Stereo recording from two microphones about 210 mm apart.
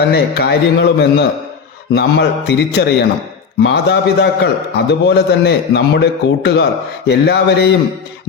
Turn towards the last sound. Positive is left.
turn(degrees=50)  # may be behind; listen again after turning